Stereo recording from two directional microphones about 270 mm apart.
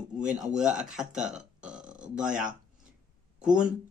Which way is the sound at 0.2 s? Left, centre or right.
Centre.